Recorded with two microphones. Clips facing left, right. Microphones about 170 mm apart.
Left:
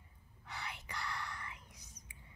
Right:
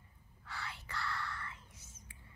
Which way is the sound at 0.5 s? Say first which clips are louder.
Even; 20° left (ahead or behind).